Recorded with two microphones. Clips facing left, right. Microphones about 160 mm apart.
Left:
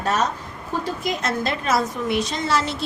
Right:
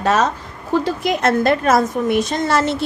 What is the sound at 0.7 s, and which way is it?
A woman's voice, 75° right (ahead or behind).